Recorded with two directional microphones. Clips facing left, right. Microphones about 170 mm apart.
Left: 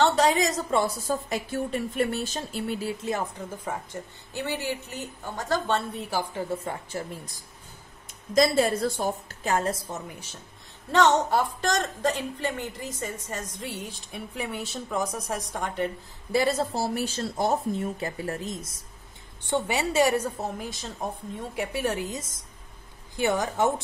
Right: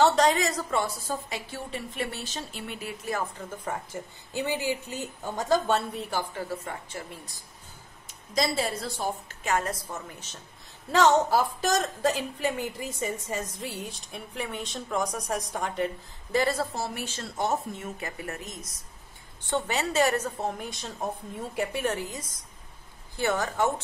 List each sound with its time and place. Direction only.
0.1 s a sound: 10° left (ahead or behind)
0.6 s a woman's voice: 35° left (ahead or behind)
3.5 s a woman's voice: 5° left (ahead or behind)
4.3 s a woman's voice: 15° right (ahead or behind)
6.3 s a woman's voice: 30° left (ahead or behind)
8.4 s a woman's voice: 50° left (ahead or behind)
9.4 s a woman's voice: 30° left (ahead or behind); by 10.4 s 10° left (ahead or behind)
10.9 s a woman's voice: 5° right (ahead or behind)
16.3 s a woman's voice: 15° left (ahead or behind)
16.7 s a woman's voice: 35° left (ahead or behind)
19.5 s a woman's voice: 10° left (ahead or behind)
21.9 s a woman's voice: 20° left (ahead or behind)